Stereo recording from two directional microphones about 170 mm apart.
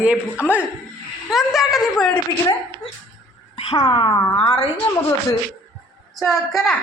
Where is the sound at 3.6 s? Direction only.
25° left (ahead or behind).